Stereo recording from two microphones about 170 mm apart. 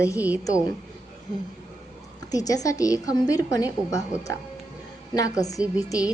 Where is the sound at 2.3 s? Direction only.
20° left (ahead or behind).